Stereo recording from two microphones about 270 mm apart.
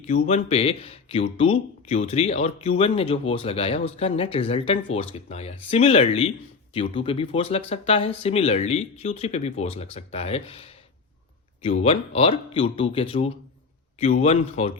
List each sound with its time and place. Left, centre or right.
0.0 s speech: left